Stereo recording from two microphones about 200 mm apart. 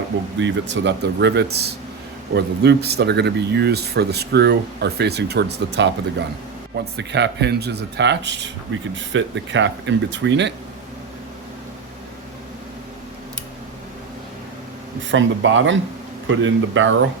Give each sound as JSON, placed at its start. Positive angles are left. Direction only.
{"t": 0.3, "sound": "speech", "side_deg": -65}
{"t": 15.1, "sound": "speech", "side_deg": -70}